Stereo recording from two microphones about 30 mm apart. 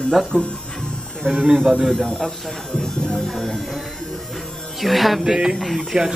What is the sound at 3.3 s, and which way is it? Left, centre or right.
Speech, centre.